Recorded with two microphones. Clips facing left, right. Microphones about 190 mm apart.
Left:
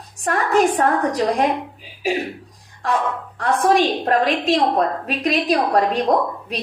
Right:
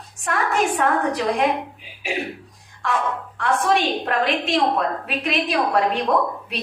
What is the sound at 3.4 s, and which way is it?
A woman's voice, 40° left (ahead or behind).